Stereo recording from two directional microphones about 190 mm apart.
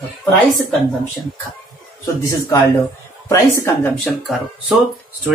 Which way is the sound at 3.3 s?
15° left (ahead or behind).